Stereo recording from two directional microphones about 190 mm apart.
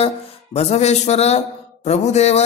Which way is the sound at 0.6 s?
35° left (ahead or behind).